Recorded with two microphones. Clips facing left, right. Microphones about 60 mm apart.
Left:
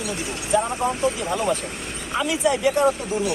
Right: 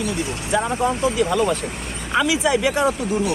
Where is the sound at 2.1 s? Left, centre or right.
Right.